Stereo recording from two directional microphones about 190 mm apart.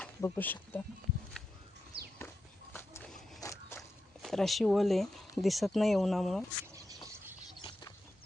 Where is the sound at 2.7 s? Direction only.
10° left (ahead or behind).